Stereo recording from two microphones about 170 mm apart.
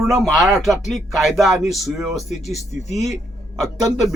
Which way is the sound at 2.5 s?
40° left (ahead or behind).